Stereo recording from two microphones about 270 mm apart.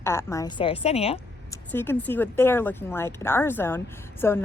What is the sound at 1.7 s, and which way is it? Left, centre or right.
Speech, centre.